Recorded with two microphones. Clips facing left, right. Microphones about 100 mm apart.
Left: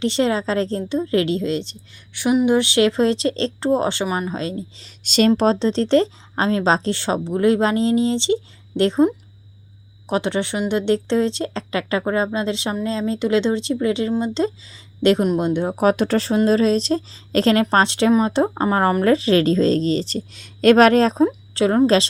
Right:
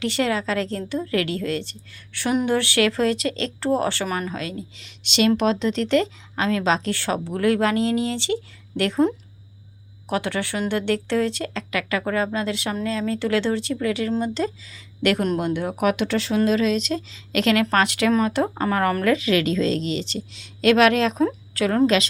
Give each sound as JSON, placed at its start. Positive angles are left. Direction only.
{"t": 0.0, "sound": "speech", "side_deg": 25}
{"t": 10.1, "sound": "speech", "side_deg": 25}
{"t": 21.5, "sound": "speech", "side_deg": 25}